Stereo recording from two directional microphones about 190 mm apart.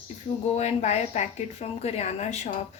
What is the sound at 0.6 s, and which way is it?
Speech, 35° left (ahead or behind).